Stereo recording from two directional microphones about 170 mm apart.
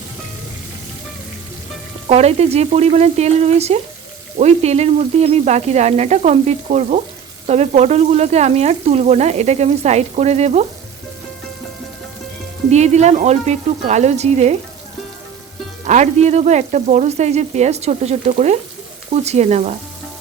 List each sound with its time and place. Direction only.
2.0 s frying: 40° right (ahead or behind)
12.7 s frying: 40° right (ahead or behind)
15.8 s frying: 45° right (ahead or behind)